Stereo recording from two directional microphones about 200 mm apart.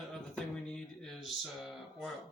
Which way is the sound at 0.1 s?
5° left (ahead or behind).